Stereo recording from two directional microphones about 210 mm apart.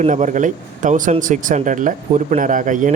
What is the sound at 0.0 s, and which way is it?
Speech, 35° right (ahead or behind).